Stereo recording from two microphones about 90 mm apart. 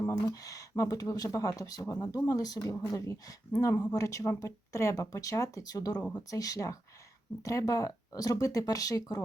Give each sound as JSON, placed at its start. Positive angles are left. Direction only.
{"t": 0.1, "sound": "speech", "side_deg": 40}